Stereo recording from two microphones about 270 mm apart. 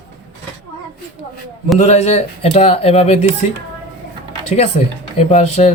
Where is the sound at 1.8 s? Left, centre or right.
Left.